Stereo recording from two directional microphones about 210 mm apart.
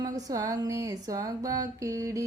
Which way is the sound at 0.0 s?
15° right (ahead or behind).